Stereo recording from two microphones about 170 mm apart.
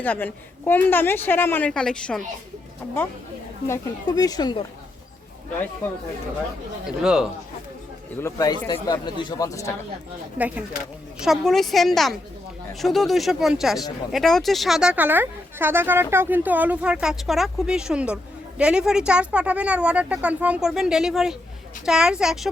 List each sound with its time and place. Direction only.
0.0 s a woman's voice: 10° left (ahead or behind)
6.8 s speech: 5° right (ahead or behind)
8.2 s speech: 20° left (ahead or behind)
10.3 s speech: 10° right (ahead or behind)